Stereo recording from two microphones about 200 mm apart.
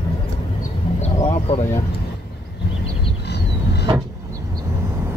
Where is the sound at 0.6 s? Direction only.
30° left (ahead or behind).